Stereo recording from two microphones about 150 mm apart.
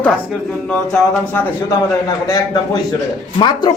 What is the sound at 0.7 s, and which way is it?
Speech, 10° left (ahead or behind).